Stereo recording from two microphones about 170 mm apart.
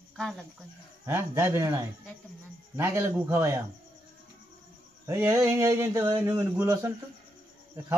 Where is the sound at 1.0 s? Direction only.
15° right (ahead or behind).